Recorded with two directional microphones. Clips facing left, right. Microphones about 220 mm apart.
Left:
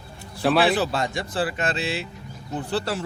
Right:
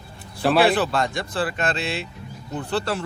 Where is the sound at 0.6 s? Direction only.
55° right (ahead or behind).